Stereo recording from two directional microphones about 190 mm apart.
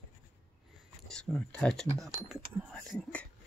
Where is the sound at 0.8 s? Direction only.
Centre (ahead or behind).